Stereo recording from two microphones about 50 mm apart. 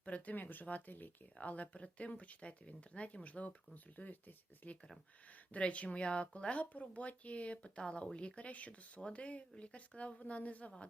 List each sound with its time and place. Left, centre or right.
0.0 s speech: left
5.5 s speech: left